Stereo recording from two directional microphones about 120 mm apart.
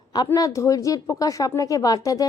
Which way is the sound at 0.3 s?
25° left (ahead or behind).